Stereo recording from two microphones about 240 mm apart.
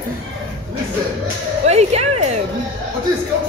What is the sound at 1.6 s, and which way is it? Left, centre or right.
Speech, right.